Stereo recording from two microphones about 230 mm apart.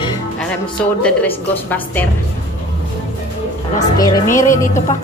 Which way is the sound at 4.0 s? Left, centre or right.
Centre.